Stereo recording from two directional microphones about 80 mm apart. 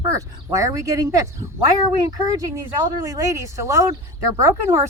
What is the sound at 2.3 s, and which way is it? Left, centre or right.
Speech, right.